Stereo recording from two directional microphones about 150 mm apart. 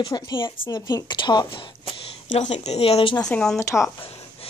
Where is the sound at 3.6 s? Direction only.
20° left (ahead or behind).